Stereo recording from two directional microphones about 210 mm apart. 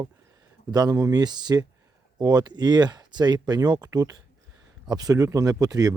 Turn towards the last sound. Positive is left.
turn(degrees=-15)  # may be behind; listen again after turning